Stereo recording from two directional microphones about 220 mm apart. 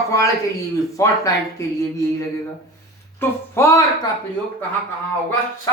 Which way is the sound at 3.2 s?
10° left (ahead or behind).